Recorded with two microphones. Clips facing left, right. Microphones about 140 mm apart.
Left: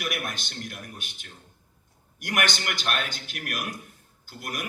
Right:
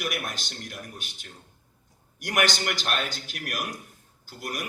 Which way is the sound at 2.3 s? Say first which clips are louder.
Right 2 dB; 50° left (ahead or behind).